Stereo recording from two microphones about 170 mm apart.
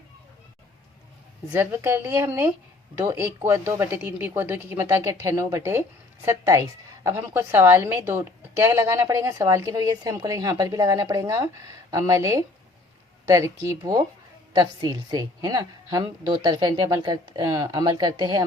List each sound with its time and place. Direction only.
1.5 s a woman's voice: 15° right (ahead or behind)